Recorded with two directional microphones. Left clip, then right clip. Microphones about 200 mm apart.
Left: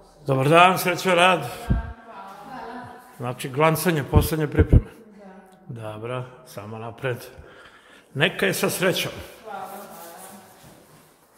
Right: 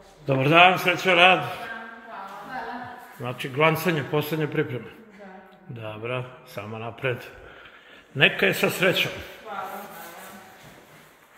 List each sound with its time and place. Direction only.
0.2 s a man's voice: 15° left (ahead or behind)
3.2 s a man's voice: 15° left (ahead or behind)
5.8 s a man's voice: 10° left (ahead or behind)